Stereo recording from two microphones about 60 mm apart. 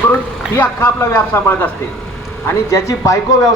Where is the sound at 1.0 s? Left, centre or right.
Left.